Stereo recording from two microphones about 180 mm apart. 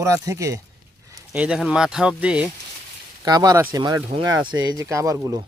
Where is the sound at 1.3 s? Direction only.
5° right (ahead or behind).